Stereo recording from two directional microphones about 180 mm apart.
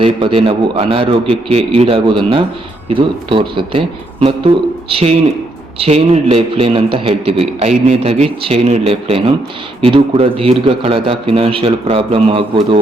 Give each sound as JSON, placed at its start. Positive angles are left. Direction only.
{"t": 0.0, "sound": "a man's voice", "side_deg": -30}